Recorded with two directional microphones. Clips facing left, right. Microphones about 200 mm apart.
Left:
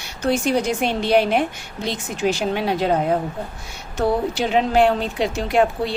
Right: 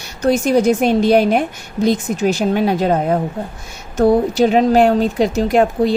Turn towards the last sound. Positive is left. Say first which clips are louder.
# right 5 dB
turn(degrees=-40)  # may be behind; listen again after turning